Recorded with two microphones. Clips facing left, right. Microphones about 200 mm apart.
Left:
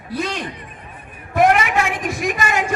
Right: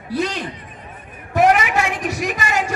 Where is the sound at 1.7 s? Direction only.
40° right (ahead or behind).